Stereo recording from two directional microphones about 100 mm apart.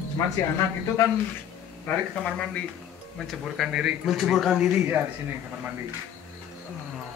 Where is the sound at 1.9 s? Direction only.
15° left (ahead or behind).